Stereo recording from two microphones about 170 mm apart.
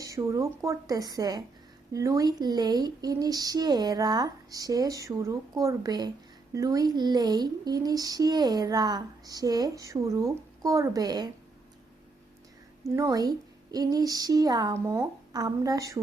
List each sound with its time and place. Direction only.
0.0 s speech: 20° right (ahead or behind)
12.8 s speech: 20° right (ahead or behind)